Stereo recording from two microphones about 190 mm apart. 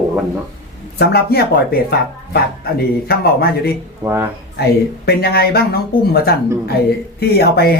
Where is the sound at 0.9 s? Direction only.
55° left (ahead or behind).